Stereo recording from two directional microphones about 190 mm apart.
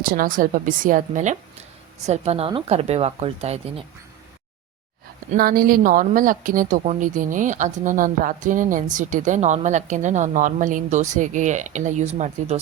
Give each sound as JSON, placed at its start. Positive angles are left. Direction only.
{"t": 0.0, "sound": "a woman's voice", "side_deg": -50}
{"t": 5.4, "sound": "a woman's voice", "side_deg": -50}